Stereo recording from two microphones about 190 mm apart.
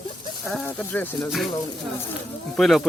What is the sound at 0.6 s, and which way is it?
Speech, 10° left (ahead or behind).